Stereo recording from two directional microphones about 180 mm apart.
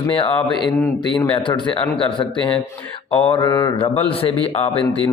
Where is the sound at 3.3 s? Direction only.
25° left (ahead or behind).